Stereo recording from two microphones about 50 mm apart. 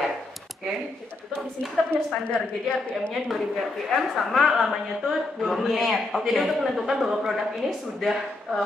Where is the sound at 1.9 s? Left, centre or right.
Centre.